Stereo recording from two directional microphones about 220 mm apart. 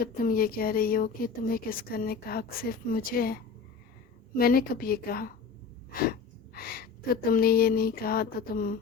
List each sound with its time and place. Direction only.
0.0 s a woman's voice: 40° left (ahead or behind)